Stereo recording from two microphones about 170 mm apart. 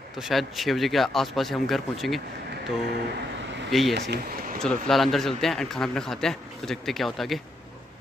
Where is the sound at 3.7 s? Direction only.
Centre (ahead or behind).